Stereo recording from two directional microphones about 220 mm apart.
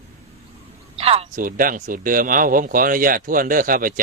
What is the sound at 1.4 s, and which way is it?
Speech, 40° right (ahead or behind).